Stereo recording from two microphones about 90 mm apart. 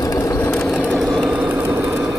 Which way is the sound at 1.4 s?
25° right (ahead or behind).